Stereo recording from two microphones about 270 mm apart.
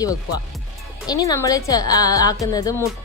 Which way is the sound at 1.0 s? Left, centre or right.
Centre.